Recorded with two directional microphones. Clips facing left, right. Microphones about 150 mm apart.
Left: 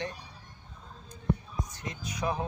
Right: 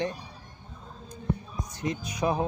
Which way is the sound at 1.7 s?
15° right (ahead or behind).